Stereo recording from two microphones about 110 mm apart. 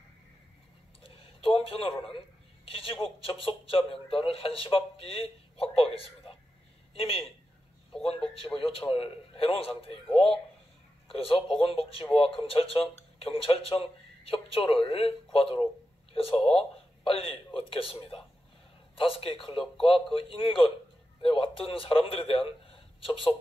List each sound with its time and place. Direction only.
1.0 s a sound: 60° left (ahead or behind)
2.7 s speech: 60° left (ahead or behind)
8.5 s speech: 60° left (ahead or behind)
10.1 s speech: 5° left (ahead or behind)
11.1 s a man's voice: 60° left (ahead or behind)
16.5 s a sound: 60° left (ahead or behind)
17.6 s speech: 60° left (ahead or behind)
18.9 s a man's voice: 60° left (ahead or behind)